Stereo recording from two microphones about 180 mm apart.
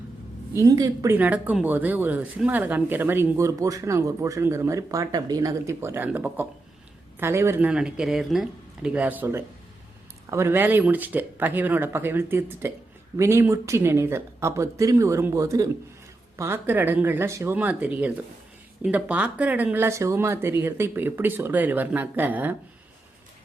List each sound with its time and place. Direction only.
0.5 s speech: 20° right (ahead or behind)